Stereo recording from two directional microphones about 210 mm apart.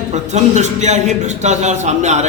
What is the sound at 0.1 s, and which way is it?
A man's voice, 35° right (ahead or behind).